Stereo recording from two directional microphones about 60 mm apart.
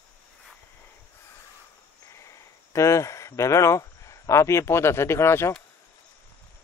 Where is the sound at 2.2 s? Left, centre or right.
Left.